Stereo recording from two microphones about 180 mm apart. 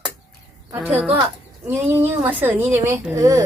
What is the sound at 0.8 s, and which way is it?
A woman's voice, 5° right (ahead or behind).